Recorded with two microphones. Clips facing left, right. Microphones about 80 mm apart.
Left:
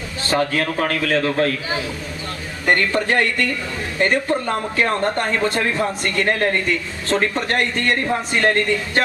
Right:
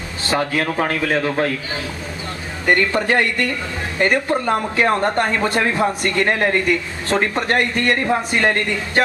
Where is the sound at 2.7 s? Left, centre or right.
Centre.